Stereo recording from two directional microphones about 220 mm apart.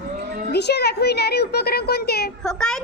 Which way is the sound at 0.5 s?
50° left (ahead or behind).